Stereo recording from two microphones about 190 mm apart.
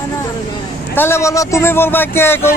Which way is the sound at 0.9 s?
15° left (ahead or behind).